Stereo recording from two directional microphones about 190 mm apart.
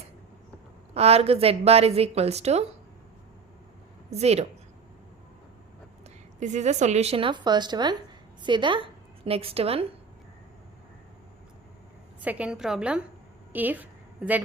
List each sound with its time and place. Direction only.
0.9 s a woman's voice: 35° right (ahead or behind)
4.1 s a woman's voice: 35° right (ahead or behind)
6.4 s a woman's voice: 40° right (ahead or behind)
12.2 s a woman's voice: 5° right (ahead or behind)